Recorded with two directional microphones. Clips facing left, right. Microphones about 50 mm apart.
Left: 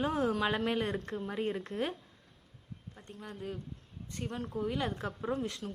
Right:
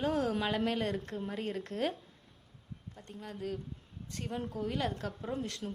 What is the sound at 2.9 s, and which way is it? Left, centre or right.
Speech, centre.